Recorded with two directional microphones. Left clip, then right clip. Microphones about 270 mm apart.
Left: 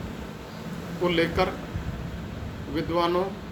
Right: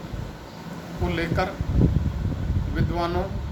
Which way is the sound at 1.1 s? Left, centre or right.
Centre.